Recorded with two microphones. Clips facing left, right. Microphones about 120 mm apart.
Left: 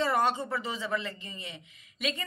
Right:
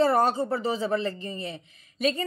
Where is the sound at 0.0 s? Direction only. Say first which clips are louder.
Right 6 dB; 40° right (ahead or behind).